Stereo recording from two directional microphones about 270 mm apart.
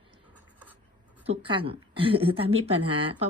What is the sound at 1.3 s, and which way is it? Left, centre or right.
Speech, centre.